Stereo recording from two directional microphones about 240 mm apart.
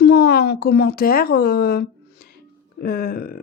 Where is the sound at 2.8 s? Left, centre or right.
Left.